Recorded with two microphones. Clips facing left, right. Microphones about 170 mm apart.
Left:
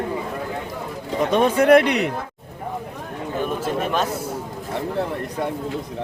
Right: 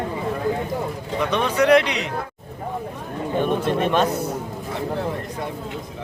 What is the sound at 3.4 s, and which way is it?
Speech, 5° left (ahead or behind).